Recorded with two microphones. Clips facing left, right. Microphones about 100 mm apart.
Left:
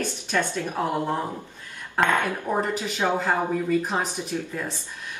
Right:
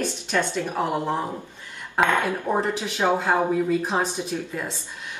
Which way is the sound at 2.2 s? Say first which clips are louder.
Right 2 dB; 20° right (ahead or behind).